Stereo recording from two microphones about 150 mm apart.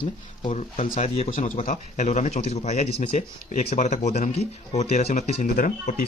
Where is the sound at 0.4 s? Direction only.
45° left (ahead or behind).